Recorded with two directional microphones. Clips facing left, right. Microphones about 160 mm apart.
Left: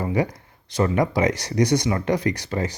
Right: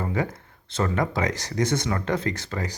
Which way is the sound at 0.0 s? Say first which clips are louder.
Left 4 dB; 15° left (ahead or behind).